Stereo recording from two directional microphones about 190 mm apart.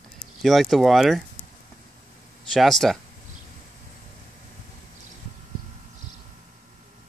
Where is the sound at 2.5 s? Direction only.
Centre (ahead or behind).